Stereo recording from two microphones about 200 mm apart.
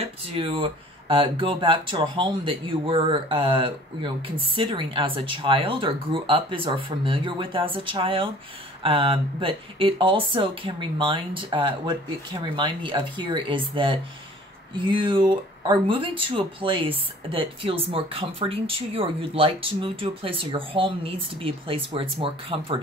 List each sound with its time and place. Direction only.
0.0 s speech: 25° right (ahead or behind)